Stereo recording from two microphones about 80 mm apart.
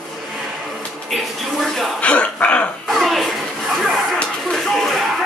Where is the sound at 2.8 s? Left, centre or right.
Centre.